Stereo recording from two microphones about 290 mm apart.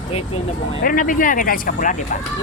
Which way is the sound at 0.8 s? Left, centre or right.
Left.